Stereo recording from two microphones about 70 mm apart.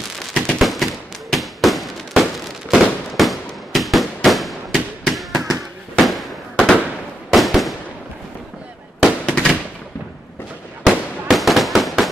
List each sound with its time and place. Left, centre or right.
0.3 s fireworks: centre
9.2 s fireworks: centre
10.9 s fireworks: centre